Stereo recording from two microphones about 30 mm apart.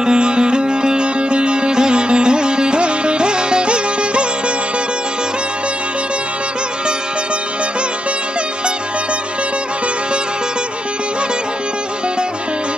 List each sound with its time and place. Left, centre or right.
0.0 s music: right